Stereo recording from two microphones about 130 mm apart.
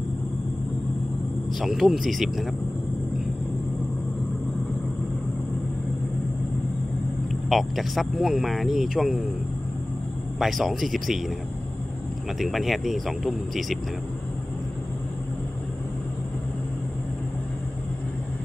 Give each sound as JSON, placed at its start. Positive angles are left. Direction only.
{"t": 1.6, "sound": "speech", "side_deg": 0}
{"t": 7.4, "sound": "speech", "side_deg": 0}
{"t": 10.4, "sound": "speech", "side_deg": 0}
{"t": 12.4, "sound": "speech", "side_deg": 0}